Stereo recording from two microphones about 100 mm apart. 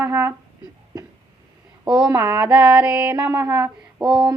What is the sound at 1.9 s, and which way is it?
Female singing, 10° right (ahead or behind).